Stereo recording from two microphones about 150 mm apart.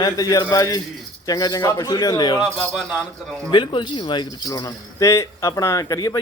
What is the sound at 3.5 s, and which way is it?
A man's voice, 30° left (ahead or behind).